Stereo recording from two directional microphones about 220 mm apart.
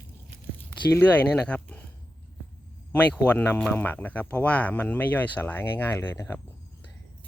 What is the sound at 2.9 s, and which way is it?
Speech, 5° left (ahead or behind).